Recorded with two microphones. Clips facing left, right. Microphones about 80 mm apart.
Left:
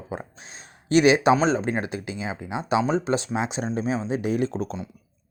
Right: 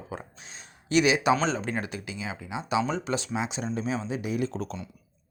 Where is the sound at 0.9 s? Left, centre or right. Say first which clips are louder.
Left 5 dB; left.